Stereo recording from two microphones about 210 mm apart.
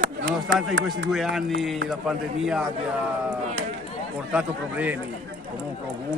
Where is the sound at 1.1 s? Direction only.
Centre (ahead or behind).